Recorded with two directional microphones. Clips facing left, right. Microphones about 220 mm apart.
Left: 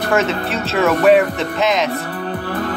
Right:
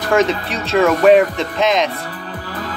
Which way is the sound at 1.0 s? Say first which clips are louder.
Right 1 dB; 5° left (ahead or behind).